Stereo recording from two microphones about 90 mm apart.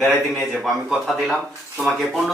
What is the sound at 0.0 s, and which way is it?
Speech, centre (ahead or behind).